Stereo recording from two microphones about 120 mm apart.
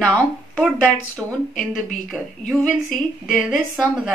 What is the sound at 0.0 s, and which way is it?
Speech, 5° left (ahead or behind).